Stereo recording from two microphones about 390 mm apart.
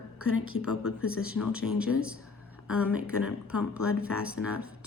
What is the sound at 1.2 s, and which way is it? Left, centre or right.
Speech, centre.